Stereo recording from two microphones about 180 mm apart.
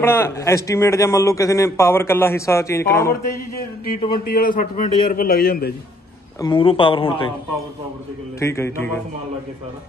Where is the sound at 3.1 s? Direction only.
55° left (ahead or behind).